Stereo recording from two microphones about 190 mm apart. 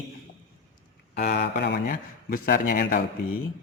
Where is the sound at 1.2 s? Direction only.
60° left (ahead or behind).